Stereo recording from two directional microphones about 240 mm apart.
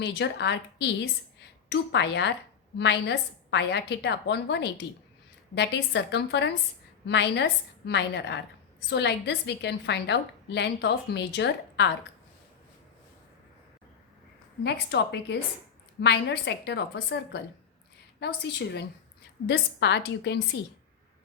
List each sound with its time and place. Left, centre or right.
0.0 s a woman's voice: left
14.6 s a woman's voice: left
19.5 s a woman's voice: left